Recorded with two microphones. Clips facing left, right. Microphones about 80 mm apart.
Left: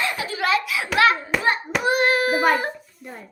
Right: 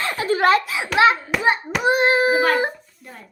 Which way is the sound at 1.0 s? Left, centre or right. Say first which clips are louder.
Right 2 dB; right.